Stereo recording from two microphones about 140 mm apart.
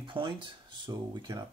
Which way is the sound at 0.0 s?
35° right (ahead or behind).